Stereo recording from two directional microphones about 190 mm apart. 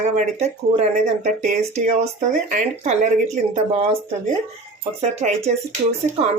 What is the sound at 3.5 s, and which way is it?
Speech, 30° right (ahead or behind).